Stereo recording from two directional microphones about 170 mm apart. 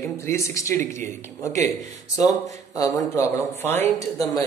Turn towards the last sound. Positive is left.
turn(degrees=10)  # may be behind; listen again after turning